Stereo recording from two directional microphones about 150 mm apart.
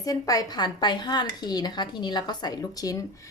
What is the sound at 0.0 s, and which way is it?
Speech, 25° left (ahead or behind).